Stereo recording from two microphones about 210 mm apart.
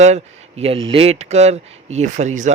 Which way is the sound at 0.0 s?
30° right (ahead or behind).